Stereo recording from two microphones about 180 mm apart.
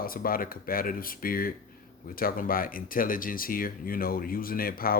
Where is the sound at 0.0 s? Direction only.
55° left (ahead or behind).